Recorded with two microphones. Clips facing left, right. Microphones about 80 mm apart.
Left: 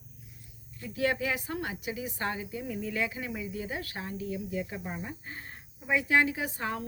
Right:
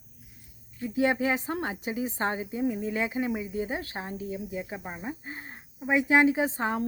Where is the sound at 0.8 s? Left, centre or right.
Right.